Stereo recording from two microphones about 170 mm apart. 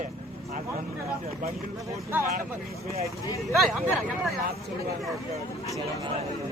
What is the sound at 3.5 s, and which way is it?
Speech, centre (ahead or behind).